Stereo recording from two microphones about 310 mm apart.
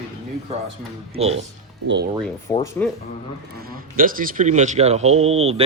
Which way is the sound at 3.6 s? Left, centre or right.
Right.